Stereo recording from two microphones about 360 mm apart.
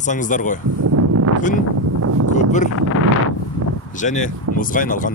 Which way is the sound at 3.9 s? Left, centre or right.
Centre.